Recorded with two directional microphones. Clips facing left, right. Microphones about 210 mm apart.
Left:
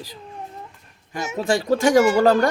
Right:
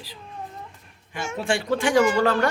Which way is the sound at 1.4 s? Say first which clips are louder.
Left 5 dB; 40° left (ahead or behind).